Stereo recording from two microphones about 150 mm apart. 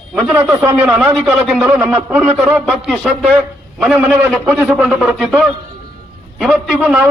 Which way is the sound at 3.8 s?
10° right (ahead or behind).